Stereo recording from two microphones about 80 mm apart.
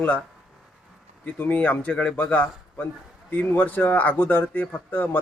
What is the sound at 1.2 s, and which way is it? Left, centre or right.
Speech, centre.